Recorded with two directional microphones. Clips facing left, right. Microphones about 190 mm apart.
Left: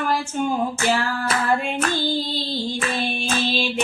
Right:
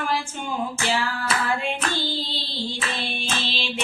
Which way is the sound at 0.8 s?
45° left (ahead or behind).